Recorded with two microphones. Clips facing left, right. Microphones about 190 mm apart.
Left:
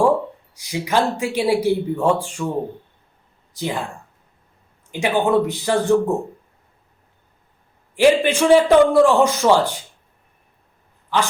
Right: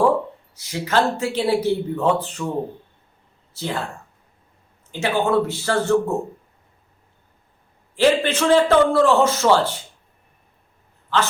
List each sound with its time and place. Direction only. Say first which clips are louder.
0.5 s speech: even; 15° left (ahead or behind)
3.5 s speech: left 2 dB; 15° left (ahead or behind)
4.9 s speech: left 2 dB; 15° left (ahead or behind)
7.9 s speech: left 3 dB; 10° left (ahead or behind)